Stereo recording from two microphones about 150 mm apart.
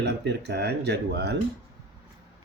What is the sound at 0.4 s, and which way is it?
Speech, 90° right.